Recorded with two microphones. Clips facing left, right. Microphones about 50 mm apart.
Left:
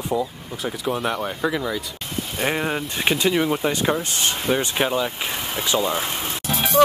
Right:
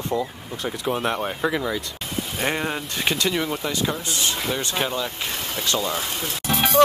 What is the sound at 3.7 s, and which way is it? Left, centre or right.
Speech, left.